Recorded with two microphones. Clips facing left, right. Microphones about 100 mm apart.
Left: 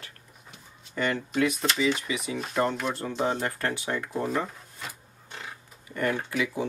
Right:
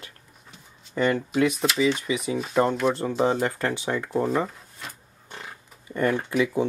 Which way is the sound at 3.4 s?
20° right (ahead or behind).